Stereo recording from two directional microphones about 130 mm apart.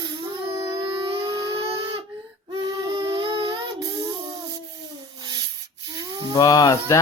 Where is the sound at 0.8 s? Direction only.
40° right (ahead or behind).